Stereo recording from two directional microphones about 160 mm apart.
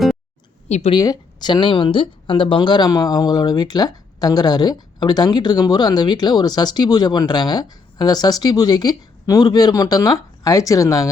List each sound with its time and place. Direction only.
0.7 s speech: 45° left (ahead or behind)
0.9 s speech: 25° left (ahead or behind)